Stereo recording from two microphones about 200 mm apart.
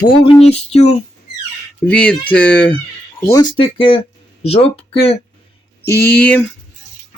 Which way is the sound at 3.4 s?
25° left (ahead or behind).